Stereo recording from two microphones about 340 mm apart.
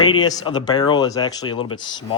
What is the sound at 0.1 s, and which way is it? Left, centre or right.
Speech, centre.